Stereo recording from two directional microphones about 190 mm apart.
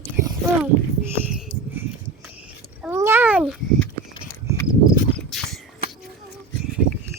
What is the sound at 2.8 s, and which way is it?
Babbling, 15° right (ahead or behind).